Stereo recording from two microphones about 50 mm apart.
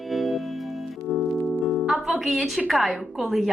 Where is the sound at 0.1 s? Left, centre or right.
Centre.